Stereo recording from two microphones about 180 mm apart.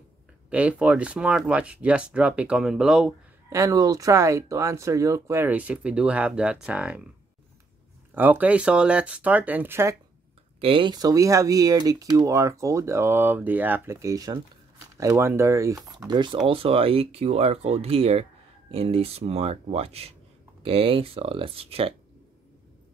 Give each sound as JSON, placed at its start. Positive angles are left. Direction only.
{"t": 0.5, "sound": "speech", "side_deg": -5}
{"t": 3.4, "sound": "speech", "side_deg": -20}
{"t": 8.1, "sound": "speech", "side_deg": -10}
{"t": 10.6, "sound": "speech", "side_deg": -30}